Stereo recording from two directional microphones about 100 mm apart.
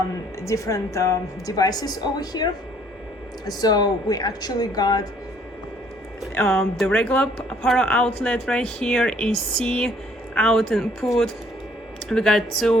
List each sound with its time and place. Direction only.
0.4 s a woman's voice: 30° left (ahead or behind)
6.3 s speech: 5° left (ahead or behind)